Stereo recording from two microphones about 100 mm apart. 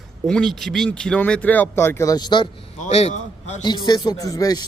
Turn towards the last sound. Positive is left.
turn(degrees=35)  # may be behind; listen again after turning